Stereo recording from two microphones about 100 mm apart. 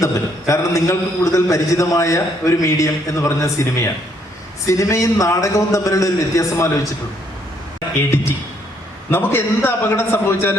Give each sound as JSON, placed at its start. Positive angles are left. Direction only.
{"t": 0.0, "sound": "a man's voice", "side_deg": 30}
{"t": 9.0, "sound": "a man's voice", "side_deg": 25}